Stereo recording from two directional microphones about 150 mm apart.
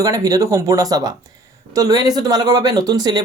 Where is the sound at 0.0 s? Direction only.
25° right (ahead or behind).